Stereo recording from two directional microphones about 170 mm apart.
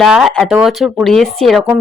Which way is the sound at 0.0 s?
Centre (ahead or behind).